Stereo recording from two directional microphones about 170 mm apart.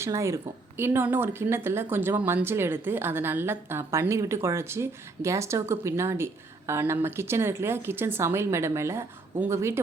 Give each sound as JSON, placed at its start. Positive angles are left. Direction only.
{"t": 0.0, "sound": "speech", "side_deg": -15}